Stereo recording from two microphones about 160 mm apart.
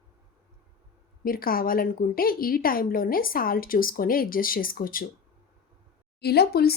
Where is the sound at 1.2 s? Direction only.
65° left (ahead or behind).